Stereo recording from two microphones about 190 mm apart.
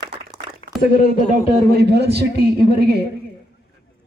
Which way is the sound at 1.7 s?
60° right (ahead or behind).